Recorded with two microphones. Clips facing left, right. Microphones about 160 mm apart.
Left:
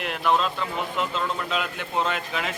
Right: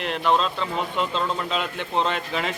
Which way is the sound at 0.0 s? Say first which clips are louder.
Right 1 dB; 5° left (ahead or behind).